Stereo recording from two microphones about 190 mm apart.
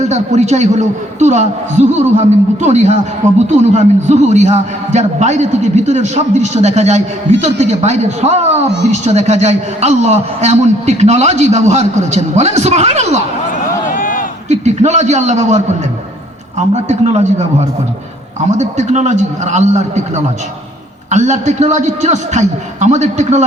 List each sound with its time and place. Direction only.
0.0 s a man's voice: 35° right (ahead or behind)
13.8 s crowd: 45° left (ahead or behind)
14.5 s a man's voice: 35° right (ahead or behind)